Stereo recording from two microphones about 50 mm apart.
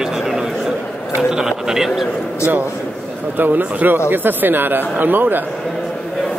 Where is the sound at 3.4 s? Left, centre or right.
Right.